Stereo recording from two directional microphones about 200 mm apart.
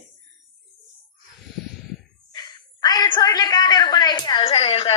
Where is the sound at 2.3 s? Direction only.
20° left (ahead or behind).